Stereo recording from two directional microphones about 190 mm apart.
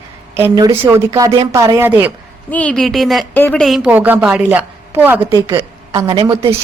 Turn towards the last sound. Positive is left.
turn(degrees=-15)  # may be behind; listen again after turning